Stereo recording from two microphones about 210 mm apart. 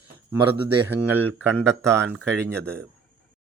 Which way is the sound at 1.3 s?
Centre (ahead or behind).